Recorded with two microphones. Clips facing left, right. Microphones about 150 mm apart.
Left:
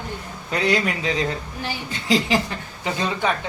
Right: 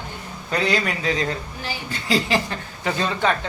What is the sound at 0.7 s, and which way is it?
Speech, 20° left (ahead or behind).